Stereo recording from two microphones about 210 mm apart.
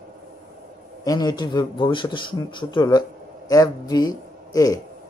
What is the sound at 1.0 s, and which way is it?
A man's voice, 20° left (ahead or behind).